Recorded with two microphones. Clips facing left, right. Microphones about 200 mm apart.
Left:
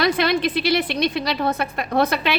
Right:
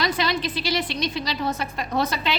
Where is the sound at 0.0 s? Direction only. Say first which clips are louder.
Left 5 dB; 60° left (ahead or behind).